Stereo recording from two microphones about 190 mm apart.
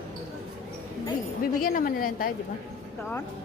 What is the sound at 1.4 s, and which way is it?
Speech, 50° left (ahead or behind).